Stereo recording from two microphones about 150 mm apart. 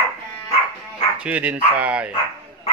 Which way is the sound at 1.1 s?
10° right (ahead or behind).